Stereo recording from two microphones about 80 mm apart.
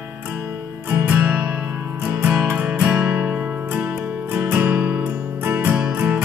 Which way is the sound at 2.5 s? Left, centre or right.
Right.